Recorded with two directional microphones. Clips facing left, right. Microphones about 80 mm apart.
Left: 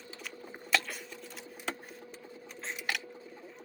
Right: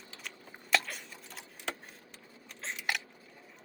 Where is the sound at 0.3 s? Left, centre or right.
Centre.